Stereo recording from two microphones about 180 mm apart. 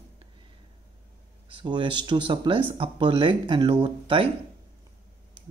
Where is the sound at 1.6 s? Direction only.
25° right (ahead or behind).